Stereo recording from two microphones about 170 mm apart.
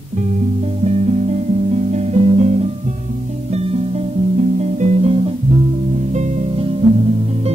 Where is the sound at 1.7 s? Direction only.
40° right (ahead or behind).